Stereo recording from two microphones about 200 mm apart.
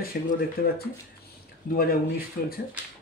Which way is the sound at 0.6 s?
50° left (ahead or behind).